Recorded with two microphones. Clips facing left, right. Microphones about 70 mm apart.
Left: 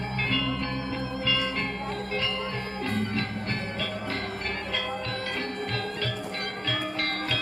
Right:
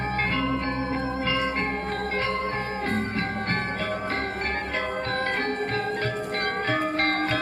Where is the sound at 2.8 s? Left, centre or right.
Right.